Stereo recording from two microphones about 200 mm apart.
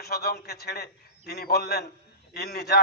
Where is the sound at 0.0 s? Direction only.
50° left (ahead or behind).